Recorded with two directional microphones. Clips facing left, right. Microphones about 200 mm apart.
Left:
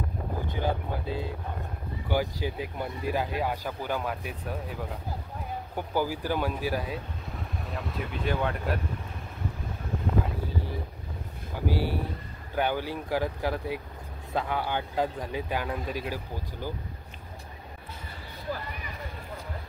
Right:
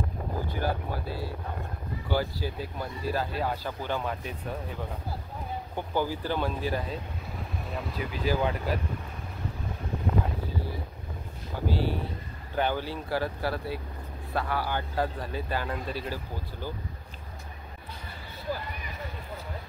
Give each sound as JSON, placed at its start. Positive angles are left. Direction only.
{"t": 0.5, "sound": "speech", "side_deg": 20}
{"t": 5.8, "sound": "speech", "side_deg": 10}
{"t": 7.7, "sound": "speech", "side_deg": 0}
{"t": 11.6, "sound": "speech", "side_deg": 10}